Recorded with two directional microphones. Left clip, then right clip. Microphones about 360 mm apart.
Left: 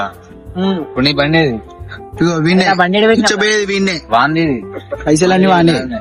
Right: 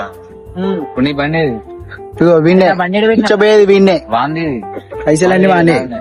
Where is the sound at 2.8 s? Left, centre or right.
Left.